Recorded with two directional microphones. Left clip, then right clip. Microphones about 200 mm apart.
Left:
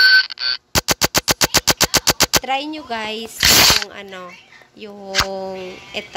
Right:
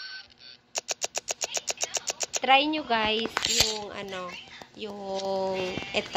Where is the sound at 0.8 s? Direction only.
65° left (ahead or behind).